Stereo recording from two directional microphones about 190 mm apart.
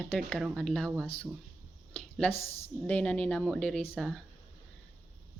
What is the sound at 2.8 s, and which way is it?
Speech, 5° left (ahead or behind).